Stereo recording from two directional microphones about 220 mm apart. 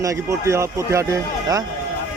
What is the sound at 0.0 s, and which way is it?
Speech, 15° right (ahead or behind).